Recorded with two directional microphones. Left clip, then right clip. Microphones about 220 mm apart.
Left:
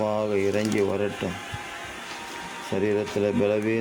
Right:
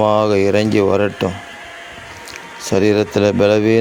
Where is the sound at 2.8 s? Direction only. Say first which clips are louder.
Right 11 dB; 45° right (ahead or behind).